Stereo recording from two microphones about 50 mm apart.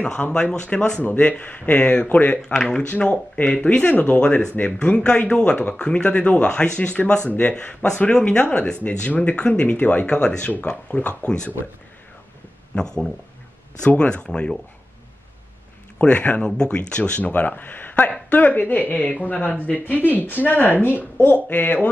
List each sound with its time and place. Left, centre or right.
0.0 s speech: left
3.0 s speech: left
8.4 s speech: left
12.7 s speech: centre
16.0 s speech: left
17.3 s speech: left